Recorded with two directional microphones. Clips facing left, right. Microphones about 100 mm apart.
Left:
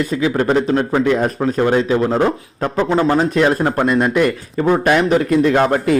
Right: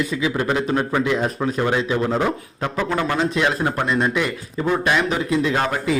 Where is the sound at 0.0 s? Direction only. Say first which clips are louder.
Left 5 dB; 45° left (ahead or behind).